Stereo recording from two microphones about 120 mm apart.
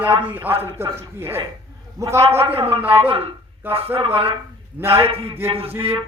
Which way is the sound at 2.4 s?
55° right (ahead or behind).